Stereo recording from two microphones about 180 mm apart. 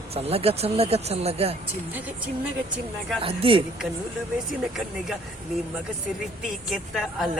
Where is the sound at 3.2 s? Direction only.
30° right (ahead or behind).